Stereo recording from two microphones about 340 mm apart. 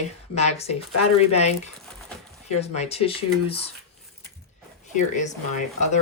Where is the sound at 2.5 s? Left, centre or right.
Centre.